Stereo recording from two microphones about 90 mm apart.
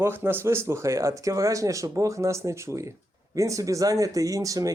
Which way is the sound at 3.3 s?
40° right (ahead or behind).